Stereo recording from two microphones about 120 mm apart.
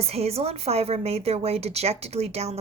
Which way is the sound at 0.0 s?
60° right (ahead or behind).